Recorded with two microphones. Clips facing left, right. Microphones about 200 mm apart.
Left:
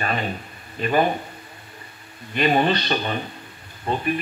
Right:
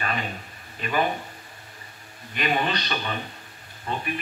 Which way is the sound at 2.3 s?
35° left (ahead or behind).